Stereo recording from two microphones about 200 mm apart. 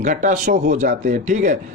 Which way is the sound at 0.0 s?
40° right (ahead or behind).